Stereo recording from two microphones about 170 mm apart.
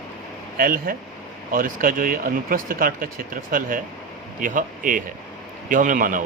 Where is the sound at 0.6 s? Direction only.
60° right (ahead or behind).